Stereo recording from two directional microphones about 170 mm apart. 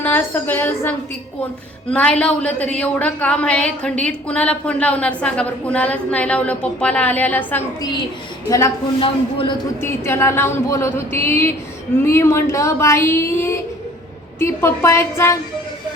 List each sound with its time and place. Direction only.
0.0 s a woman's voice: 10° left (ahead or behind)
9.0 s speech: 30° left (ahead or behind)
9.8 s a woman's voice: 15° left (ahead or behind)